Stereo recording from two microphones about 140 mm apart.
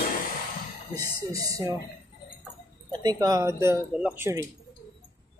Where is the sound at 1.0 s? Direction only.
25° right (ahead or behind).